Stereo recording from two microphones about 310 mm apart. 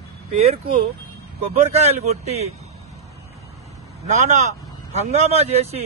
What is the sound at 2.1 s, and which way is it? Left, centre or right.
Speech, right.